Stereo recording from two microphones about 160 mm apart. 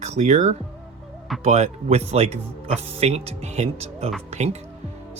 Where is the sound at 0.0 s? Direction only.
45° right (ahead or behind).